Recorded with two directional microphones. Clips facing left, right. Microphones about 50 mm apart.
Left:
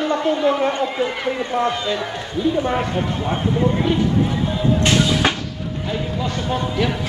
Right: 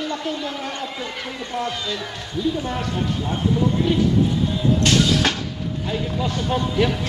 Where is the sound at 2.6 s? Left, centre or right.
Left.